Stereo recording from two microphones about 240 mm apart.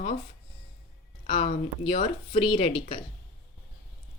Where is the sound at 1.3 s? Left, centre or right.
Left.